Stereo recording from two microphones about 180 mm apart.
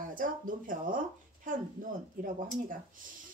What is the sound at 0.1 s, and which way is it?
Speech, 50° right (ahead or behind).